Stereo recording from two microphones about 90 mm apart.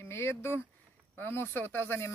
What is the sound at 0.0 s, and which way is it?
Speech, 30° left (ahead or behind).